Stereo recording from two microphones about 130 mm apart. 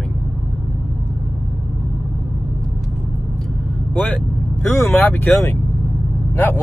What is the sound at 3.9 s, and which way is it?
Speech, 10° left (ahead or behind).